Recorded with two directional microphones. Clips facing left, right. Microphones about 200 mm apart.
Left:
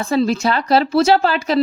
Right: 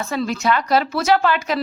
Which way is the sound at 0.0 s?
30° left (ahead or behind).